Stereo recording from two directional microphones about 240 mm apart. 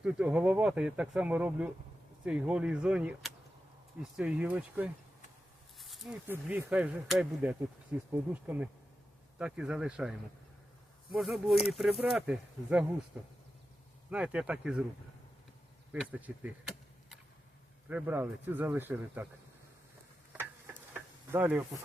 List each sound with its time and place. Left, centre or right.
0.0 s speech: centre
15.9 s speech: centre
20.9 s insect: centre